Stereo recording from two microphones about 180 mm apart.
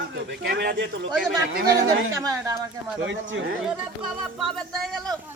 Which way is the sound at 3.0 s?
90° right.